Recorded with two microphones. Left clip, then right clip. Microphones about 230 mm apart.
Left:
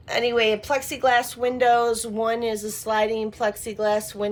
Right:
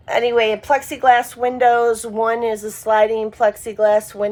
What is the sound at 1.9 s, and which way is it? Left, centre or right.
Speech, centre.